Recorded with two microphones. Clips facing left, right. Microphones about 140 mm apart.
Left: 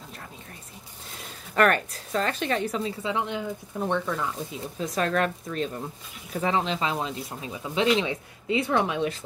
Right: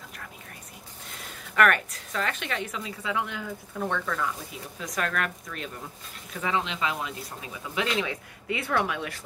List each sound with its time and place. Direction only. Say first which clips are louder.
1.5 s a woman's voice: left 1 dB; 35° left (ahead or behind)